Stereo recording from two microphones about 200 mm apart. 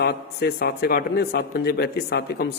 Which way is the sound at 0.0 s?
50° left (ahead or behind).